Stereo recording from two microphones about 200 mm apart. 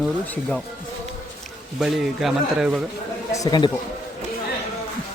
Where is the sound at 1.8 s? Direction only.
Centre (ahead or behind).